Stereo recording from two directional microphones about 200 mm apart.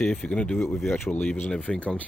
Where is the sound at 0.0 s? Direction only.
5° left (ahead or behind).